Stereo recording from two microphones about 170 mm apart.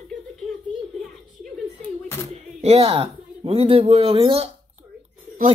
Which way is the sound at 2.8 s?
35° right (ahead or behind).